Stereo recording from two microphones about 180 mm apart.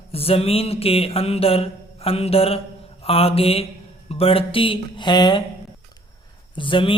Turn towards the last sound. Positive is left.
turn(degrees=30)  # may be behind; listen again after turning